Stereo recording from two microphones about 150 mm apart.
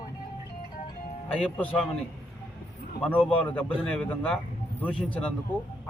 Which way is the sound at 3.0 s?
10° left (ahead or behind).